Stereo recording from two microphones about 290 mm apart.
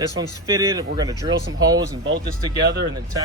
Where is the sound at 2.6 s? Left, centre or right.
Right.